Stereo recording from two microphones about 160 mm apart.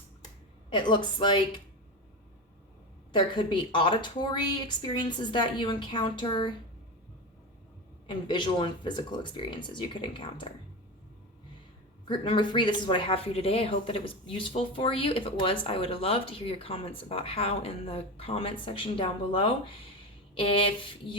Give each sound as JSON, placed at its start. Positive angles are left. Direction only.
{"t": 0.7, "sound": "speech", "side_deg": 30}
{"t": 3.1, "sound": "speech", "side_deg": 30}
{"t": 8.0, "sound": "speech", "side_deg": 30}
{"t": 12.0, "sound": "speech", "side_deg": 30}